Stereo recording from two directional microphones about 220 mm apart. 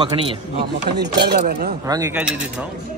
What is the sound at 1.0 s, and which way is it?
Speech, 50° right (ahead or behind).